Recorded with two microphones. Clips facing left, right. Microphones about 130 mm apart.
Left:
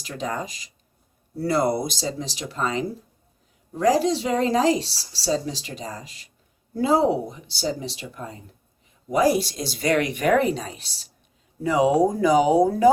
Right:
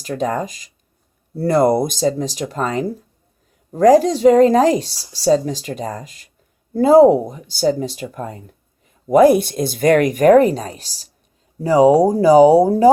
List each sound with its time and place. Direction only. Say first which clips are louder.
0.0 s speech: right 8 dB; 45° right (ahead or behind)